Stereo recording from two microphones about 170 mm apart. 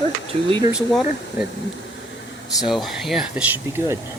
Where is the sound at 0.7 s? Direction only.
5° right (ahead or behind).